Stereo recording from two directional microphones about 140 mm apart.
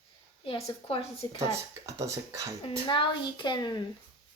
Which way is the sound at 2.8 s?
35° left (ahead or behind).